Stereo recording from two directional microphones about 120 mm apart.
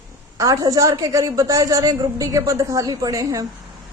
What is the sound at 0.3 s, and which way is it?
A woman's voice, 30° right (ahead or behind).